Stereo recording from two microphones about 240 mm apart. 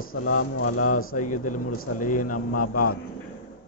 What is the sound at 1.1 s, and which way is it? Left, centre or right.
Speech, left.